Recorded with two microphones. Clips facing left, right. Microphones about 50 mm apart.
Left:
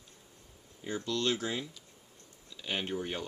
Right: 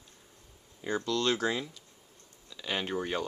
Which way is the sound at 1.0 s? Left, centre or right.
Right.